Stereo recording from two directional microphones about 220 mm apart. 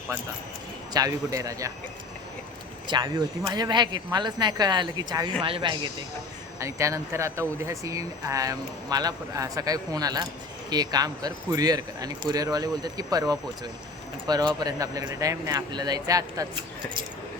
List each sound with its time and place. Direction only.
0.9 s speech: 15° right (ahead or behind)
2.8 s speech: 20° right (ahead or behind)